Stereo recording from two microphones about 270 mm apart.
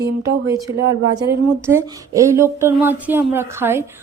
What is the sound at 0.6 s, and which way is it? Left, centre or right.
Speech, centre.